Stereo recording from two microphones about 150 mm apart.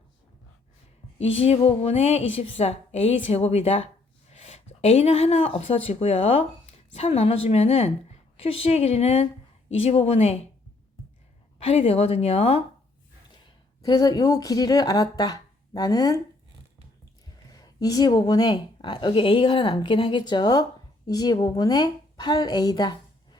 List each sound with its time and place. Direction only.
1.2 s a woman's voice: 45° left (ahead or behind)
11.6 s a woman's voice: 40° left (ahead or behind)
13.8 s speech: 25° left (ahead or behind)
17.5 s a woman's voice: 25° left (ahead or behind)